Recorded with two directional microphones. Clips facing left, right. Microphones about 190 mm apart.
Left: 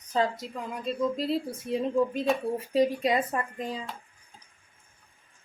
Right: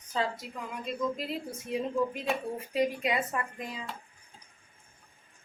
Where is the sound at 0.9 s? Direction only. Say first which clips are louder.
Left 5 dB; 35° left (ahead or behind).